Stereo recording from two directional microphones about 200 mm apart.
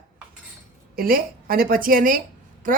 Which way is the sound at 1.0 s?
45° right (ahead or behind).